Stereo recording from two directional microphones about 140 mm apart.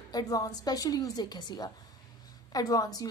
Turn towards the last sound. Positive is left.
turn(degrees=25)  # may be behind; listen again after turning